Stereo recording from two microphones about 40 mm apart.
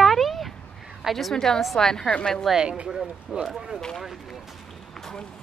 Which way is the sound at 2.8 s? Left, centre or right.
Centre.